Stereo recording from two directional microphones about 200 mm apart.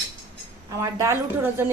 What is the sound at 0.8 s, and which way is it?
Speech, 15° right (ahead or behind).